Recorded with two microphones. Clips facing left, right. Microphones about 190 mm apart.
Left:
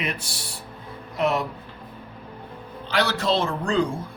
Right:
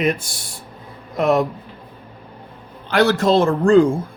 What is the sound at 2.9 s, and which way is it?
Speech, 50° right (ahead or behind).